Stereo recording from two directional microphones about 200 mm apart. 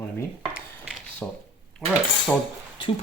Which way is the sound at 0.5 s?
5° right (ahead or behind).